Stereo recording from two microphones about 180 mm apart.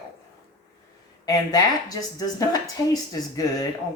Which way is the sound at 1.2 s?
20° left (ahead or behind).